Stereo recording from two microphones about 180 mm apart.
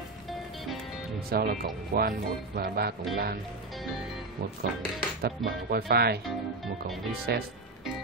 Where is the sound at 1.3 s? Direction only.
55° right (ahead or behind).